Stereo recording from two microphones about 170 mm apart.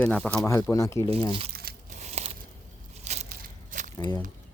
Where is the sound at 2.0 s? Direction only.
40° right (ahead or behind).